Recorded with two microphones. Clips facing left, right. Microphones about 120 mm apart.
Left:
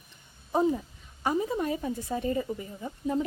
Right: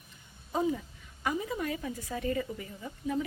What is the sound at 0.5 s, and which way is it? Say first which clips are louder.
A woman's voice: left 5 dB; 30° left (ahead or behind).